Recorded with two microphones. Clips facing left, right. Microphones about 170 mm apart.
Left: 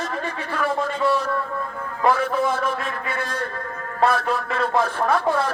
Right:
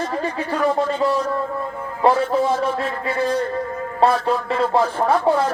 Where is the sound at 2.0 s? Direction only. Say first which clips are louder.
Right 3 dB; 25° right (ahead or behind).